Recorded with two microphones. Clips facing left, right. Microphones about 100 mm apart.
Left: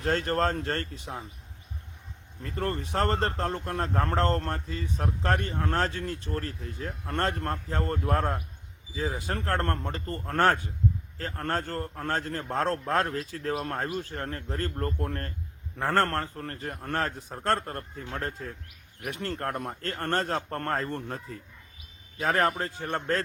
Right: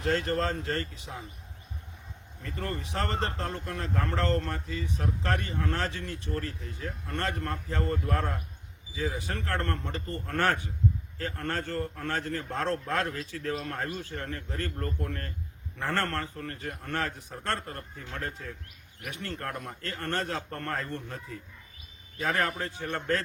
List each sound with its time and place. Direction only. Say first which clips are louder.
0.0 s speech: left 2 dB; 40° left (ahead or behind)
2.4 s speech: left 4 dB; 35° left (ahead or behind)